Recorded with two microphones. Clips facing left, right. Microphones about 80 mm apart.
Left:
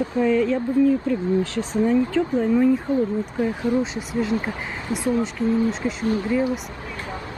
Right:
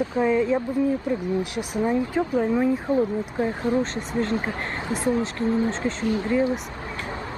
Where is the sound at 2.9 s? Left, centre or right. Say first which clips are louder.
Left 1 dB; right.